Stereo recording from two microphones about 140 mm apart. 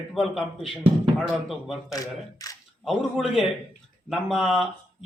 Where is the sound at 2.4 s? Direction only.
25° left (ahead or behind).